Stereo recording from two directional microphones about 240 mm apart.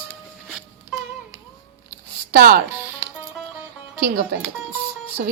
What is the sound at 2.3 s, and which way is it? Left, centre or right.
Speech, right.